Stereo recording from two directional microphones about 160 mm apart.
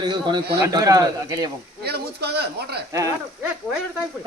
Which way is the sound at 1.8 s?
90° right.